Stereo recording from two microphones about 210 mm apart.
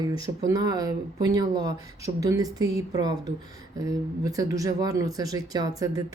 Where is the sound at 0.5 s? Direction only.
15° right (ahead or behind).